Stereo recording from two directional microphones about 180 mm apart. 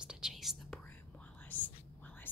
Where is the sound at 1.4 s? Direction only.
10° left (ahead or behind).